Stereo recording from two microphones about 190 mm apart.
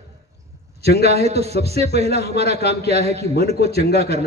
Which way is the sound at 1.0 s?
35° right (ahead or behind).